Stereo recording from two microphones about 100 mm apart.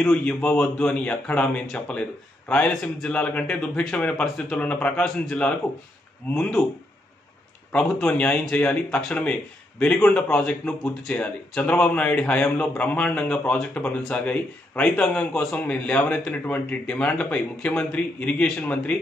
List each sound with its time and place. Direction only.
0.1 s a man's voice: 10° left (ahead or behind)
7.7 s speech: 10° left (ahead or behind)